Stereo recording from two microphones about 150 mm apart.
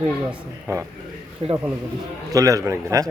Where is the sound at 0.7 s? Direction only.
20° right (ahead or behind).